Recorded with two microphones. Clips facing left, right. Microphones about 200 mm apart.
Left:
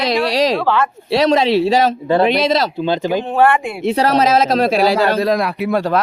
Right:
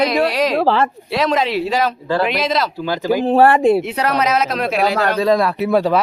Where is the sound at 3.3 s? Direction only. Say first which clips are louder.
Right 5 dB; 35° right (ahead or behind).